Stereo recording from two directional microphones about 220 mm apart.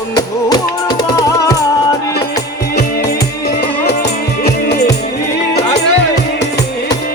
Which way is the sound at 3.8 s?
50° left (ahead or behind).